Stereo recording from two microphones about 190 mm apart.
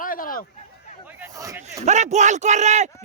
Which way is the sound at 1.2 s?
15° right (ahead or behind).